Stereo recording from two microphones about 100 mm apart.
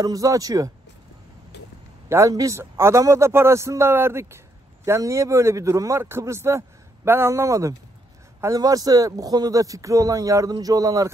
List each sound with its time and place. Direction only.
0.0 s a man's voice: 35° right (ahead or behind)
2.0 s a man's voice: 30° right (ahead or behind)